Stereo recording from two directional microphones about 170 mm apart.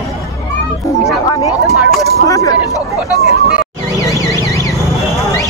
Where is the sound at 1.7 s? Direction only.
Centre (ahead or behind).